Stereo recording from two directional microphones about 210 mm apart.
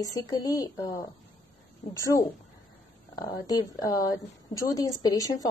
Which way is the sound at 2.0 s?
15° left (ahead or behind).